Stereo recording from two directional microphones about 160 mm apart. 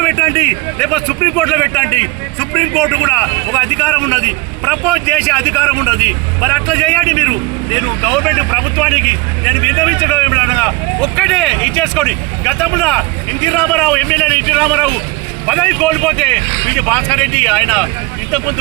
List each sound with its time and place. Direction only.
0.8 s speech: 5° left (ahead or behind)